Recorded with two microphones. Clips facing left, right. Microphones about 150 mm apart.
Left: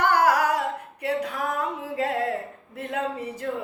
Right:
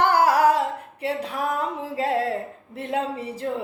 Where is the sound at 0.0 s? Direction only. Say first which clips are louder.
Right 3 dB; 30° right (ahead or behind).